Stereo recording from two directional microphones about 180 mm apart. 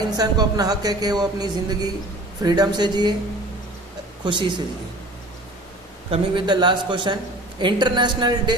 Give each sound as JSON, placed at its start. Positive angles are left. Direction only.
{"t": 0.2, "sound": "a woman's voice", "side_deg": -20}
{"t": 4.3, "sound": "a woman's voice", "side_deg": -25}
{"t": 6.1, "sound": "a woman's voice", "side_deg": -25}